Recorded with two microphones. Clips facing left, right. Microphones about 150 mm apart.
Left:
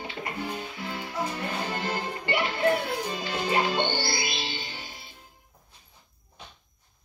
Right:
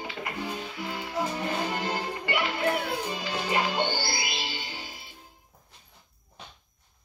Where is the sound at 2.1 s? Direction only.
25° left (ahead or behind).